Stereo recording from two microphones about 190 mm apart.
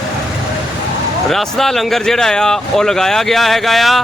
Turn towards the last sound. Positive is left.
turn(degrees=0)  # may be behind; listen again after turning